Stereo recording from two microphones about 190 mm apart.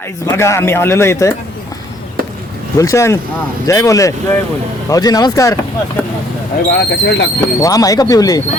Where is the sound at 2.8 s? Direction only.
15° left (ahead or behind).